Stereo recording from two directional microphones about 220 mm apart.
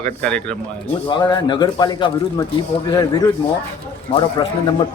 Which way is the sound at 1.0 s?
20° left (ahead or behind).